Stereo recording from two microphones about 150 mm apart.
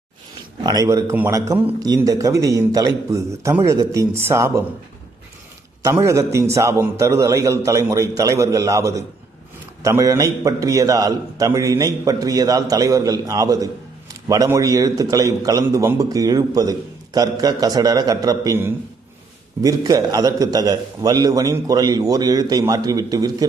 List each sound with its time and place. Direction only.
0.6 s a man's voice: 25° right (ahead or behind)
5.8 s a man's voice: 20° right (ahead or behind)
9.8 s a man's voice: 20° right (ahead or behind)